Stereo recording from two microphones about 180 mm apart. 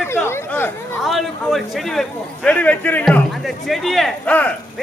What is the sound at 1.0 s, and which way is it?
A man's voice, centre (ahead or behind).